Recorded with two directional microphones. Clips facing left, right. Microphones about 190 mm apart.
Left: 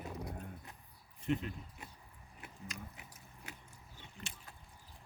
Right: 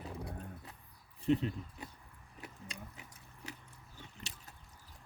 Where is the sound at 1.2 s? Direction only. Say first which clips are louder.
Right 5 dB; 35° right (ahead or behind).